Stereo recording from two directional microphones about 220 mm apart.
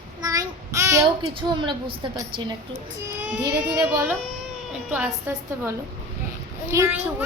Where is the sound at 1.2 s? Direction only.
25° right (ahead or behind).